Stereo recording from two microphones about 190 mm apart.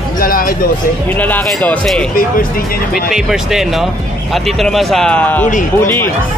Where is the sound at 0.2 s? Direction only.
50° left (ahead or behind).